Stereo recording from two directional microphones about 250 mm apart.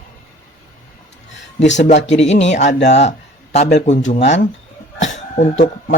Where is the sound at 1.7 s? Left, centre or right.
Left.